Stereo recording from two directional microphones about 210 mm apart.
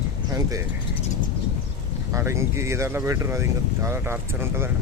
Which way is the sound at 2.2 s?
15° right (ahead or behind).